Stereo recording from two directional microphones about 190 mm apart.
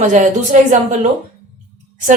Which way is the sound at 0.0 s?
40° right (ahead or behind).